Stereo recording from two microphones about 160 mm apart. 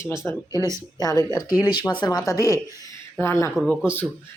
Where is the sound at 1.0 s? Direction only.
20° left (ahead or behind).